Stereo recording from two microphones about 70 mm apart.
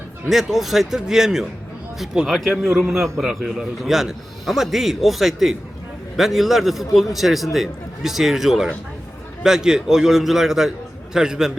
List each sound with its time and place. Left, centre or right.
0.3 s a man's voice: centre